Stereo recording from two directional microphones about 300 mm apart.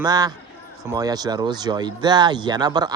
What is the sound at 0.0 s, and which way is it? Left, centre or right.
Speech, centre.